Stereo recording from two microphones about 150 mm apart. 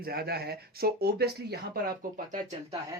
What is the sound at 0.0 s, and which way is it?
Speech, 90° right.